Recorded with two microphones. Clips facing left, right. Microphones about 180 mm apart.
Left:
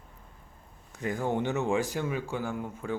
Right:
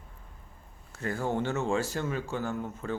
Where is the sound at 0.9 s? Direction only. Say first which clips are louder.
Left 1 dB; 15° left (ahead or behind).